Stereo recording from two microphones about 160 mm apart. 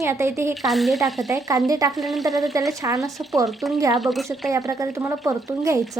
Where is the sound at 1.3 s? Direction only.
20° right (ahead or behind).